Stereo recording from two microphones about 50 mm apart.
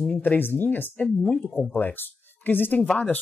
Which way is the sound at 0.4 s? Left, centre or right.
Left.